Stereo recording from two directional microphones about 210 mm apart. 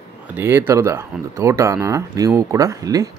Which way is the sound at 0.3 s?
10° right (ahead or behind).